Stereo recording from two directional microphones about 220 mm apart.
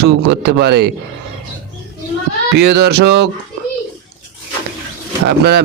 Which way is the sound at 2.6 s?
50° right (ahead or behind).